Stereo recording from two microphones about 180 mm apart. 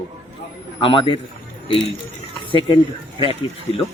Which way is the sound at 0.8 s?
30° left (ahead or behind).